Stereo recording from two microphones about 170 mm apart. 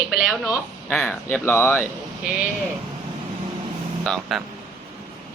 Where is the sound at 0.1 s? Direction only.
Centre (ahead or behind).